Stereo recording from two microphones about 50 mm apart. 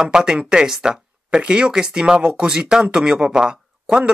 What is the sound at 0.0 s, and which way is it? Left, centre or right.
Speech, centre.